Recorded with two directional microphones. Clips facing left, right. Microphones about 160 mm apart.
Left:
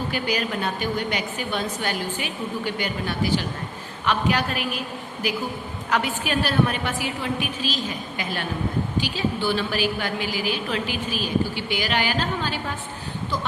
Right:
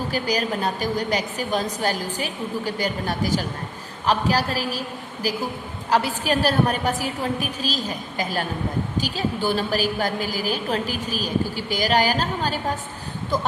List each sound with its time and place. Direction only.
0.1 s a woman's voice: 40° right (ahead or behind)